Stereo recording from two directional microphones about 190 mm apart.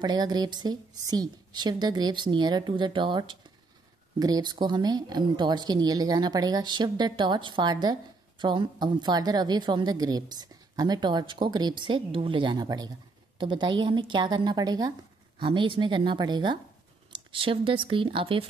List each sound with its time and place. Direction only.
0.0 s speech: 20° right (ahead or behind)